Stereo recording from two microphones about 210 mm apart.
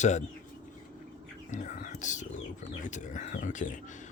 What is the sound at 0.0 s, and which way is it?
Speech, 35° left (ahead or behind).